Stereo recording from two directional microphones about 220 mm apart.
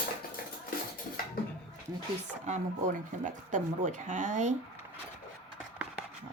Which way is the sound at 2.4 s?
35° right (ahead or behind).